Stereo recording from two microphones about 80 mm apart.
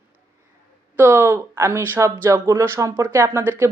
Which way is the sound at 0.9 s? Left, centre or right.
Right.